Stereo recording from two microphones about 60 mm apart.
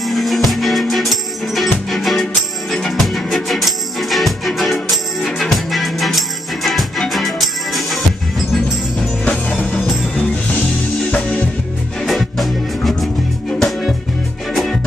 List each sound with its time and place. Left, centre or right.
0.0 s music: centre
11.1 s music: left
12.0 s music: centre